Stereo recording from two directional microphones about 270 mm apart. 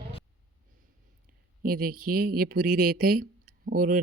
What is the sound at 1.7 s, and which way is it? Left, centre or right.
Speech, right.